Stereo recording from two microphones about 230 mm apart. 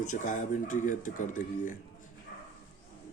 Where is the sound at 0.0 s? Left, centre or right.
Left.